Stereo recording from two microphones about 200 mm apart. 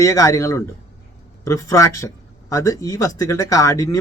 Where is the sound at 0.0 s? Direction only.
15° left (ahead or behind).